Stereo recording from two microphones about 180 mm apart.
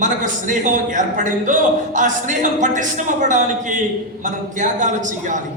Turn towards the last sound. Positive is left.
turn(degrees=-45)  # may be behind; listen again after turning